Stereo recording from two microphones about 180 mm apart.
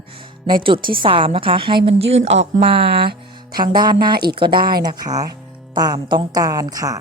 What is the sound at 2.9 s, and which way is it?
Speech, 60° right (ahead or behind).